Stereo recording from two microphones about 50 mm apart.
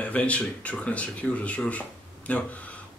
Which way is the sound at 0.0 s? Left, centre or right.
Left.